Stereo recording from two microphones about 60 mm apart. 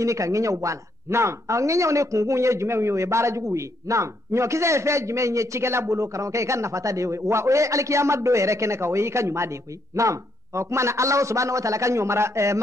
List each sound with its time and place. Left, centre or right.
0.0 s speech: right